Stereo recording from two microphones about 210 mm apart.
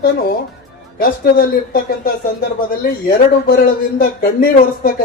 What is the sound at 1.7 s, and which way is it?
Speech, 45° left (ahead or behind).